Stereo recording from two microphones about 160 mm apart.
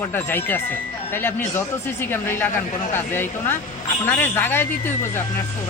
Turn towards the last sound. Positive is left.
turn(degrees=15)  # may be behind; listen again after turning